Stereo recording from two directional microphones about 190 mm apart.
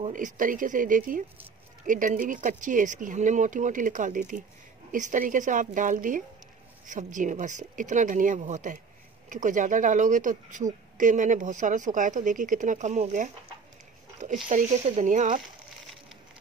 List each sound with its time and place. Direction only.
0.0 s speech: 45° right (ahead or behind)
14.5 s speech: 40° right (ahead or behind)